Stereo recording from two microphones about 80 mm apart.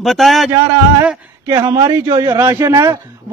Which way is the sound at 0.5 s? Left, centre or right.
Right.